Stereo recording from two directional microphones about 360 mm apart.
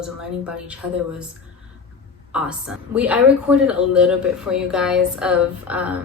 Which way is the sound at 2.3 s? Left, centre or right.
Centre.